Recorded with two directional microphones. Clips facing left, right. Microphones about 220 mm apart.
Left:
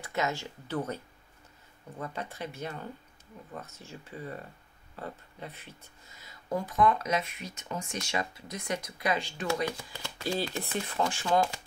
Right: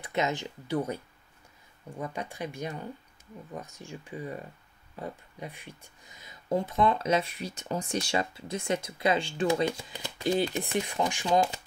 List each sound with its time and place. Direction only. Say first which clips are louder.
0.0 s speech: right 2 dB; 20° right (ahead or behind)